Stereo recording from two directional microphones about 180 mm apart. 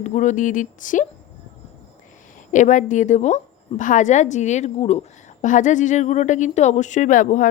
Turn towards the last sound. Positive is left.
turn(degrees=45)  # may be behind; listen again after turning